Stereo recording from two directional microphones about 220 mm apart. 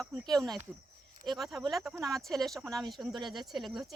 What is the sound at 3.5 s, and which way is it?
Speech, centre (ahead or behind).